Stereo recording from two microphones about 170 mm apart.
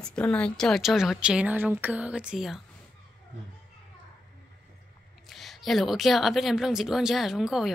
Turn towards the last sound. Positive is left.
turn(degrees=0)  # may be behind; listen again after turning